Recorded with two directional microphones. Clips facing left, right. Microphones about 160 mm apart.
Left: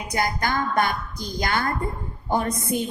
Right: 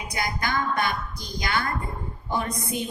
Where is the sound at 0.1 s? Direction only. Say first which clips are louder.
Left 4 dB; 50° left (ahead or behind).